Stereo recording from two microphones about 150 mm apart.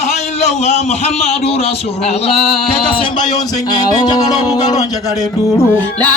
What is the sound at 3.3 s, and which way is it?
Speech, 25° left (ahead or behind).